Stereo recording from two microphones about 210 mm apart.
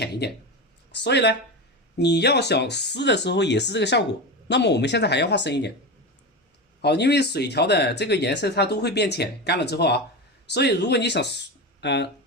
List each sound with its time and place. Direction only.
0.0 s speech: 50° left (ahead or behind)
6.8 s speech: 50° left (ahead or behind)